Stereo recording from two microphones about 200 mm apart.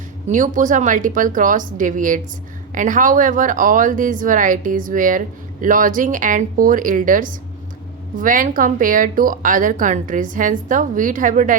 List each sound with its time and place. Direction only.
0.3 s speech: 40° right (ahead or behind)